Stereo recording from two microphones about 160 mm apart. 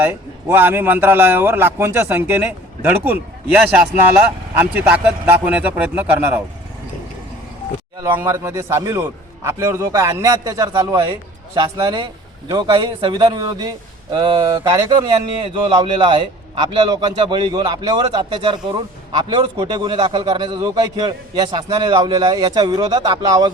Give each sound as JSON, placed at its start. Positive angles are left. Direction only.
{"t": 0.0, "sound": "speech", "side_deg": -10}
{"t": 7.9, "sound": "a man's voice", "side_deg": -15}
{"t": 11.6, "sound": "speech", "side_deg": -25}